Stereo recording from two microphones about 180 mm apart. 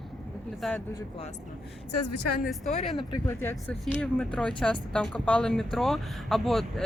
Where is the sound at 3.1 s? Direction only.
15° left (ahead or behind).